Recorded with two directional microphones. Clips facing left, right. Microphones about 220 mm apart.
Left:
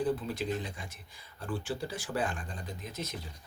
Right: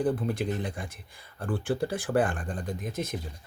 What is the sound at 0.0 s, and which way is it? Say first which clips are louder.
Speech: right 4 dB; 55° right (ahead or behind).